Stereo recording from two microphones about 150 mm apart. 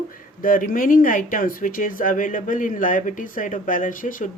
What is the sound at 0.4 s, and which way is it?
Speech, 65° left (ahead or behind).